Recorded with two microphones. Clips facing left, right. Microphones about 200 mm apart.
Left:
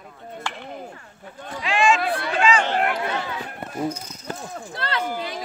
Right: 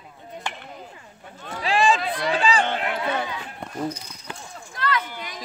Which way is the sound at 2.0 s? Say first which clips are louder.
Left 1 dB; 60° left (ahead or behind).